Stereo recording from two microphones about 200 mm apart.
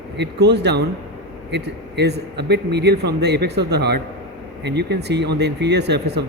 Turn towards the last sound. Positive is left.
turn(degrees=-55)  # may be behind; listen again after turning